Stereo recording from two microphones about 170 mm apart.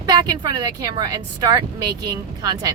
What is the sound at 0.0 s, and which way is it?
Speech, 25° right (ahead or behind).